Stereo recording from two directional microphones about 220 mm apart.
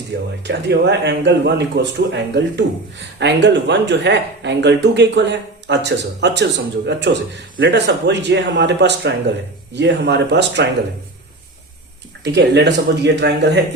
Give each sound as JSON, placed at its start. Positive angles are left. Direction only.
{"t": 0.1, "sound": "speech", "side_deg": -50}
{"t": 12.2, "sound": "speech", "side_deg": -50}